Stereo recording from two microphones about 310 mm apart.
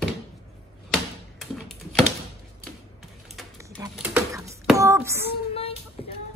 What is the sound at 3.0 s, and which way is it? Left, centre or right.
Typewriter, centre.